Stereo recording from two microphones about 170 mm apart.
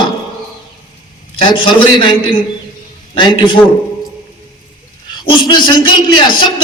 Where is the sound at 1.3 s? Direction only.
30° left (ahead or behind).